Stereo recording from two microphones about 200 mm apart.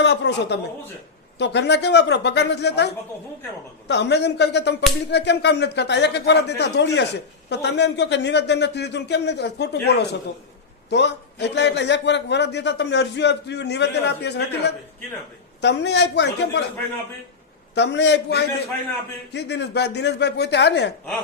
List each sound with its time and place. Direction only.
0.0 s speech: 60° left (ahead or behind)
17.7 s speech: 60° left (ahead or behind)